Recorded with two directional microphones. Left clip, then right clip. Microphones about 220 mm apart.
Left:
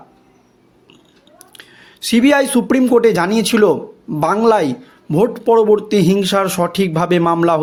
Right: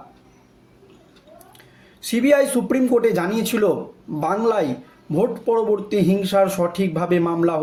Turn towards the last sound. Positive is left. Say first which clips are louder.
# left 6 dB
turn(degrees=45)  # may be behind; listen again after turning